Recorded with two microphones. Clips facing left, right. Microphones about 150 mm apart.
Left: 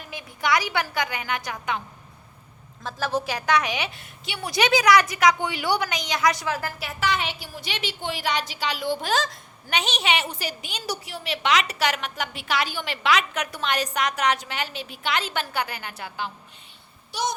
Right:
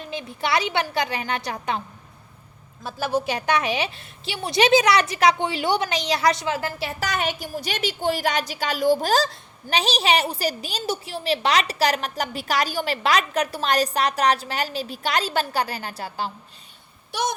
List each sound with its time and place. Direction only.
0.0 s a woman's voice: 25° right (ahead or behind)
2.8 s a woman's voice: 10° right (ahead or behind)
3.2 s a woman's voice: 25° right (ahead or behind)
17.1 s speech: 55° right (ahead or behind)